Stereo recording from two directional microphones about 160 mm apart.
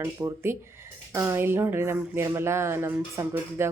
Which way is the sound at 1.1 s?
15° right (ahead or behind).